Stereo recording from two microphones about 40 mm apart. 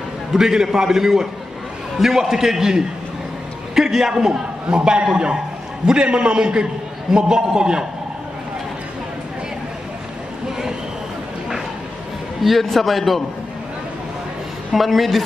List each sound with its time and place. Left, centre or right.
0.3 s a man's voice: centre
12.4 s a man's voice: centre
14.8 s a man's voice: centre